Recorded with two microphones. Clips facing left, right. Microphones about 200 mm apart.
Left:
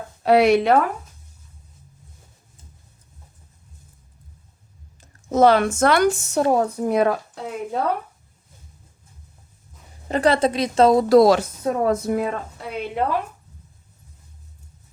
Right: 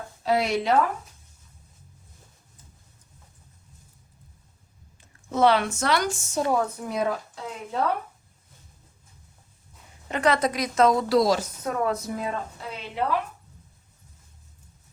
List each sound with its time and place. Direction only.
0.2 s speech: 65° left (ahead or behind)
4.9 s speech: 40° left (ahead or behind); by 6.4 s 65° left (ahead or behind)
6.5 s a woman's voice: 35° left (ahead or behind)
6.8 s speech: 60° left (ahead or behind)
10.1 s a woman's voice: 30° left (ahead or behind)
11.1 s speech: 60° left (ahead or behind)
11.6 s a woman's voice: 35° left (ahead or behind)
12.0 s speech: 60° left (ahead or behind)
12.7 s a woman's voice: 50° left (ahead or behind)